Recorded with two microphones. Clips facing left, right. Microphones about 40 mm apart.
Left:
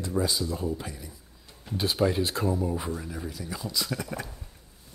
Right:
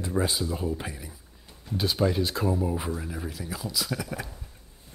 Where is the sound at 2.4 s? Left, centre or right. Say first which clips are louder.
Right 1 dB; centre.